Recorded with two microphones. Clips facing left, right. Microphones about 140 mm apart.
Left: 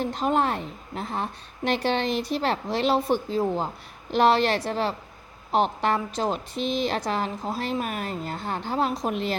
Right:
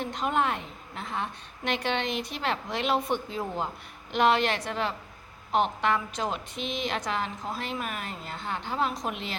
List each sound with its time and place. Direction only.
0.0 s a woman's voice: 35° left (ahead or behind)